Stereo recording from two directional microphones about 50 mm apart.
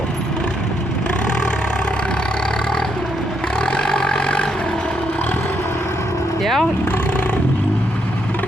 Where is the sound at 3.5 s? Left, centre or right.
Left.